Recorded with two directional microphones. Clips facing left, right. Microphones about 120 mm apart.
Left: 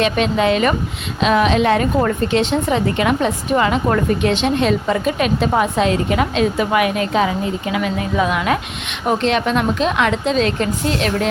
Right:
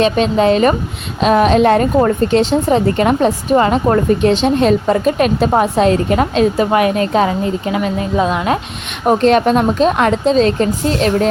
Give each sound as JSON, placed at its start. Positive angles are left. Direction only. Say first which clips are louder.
{"t": 0.0, "sound": "a woman's voice", "louder": "right 4 dB", "side_deg": -35}
{"t": 9.0, "sound": "a woman's voice", "louder": "right 6 dB", "side_deg": -40}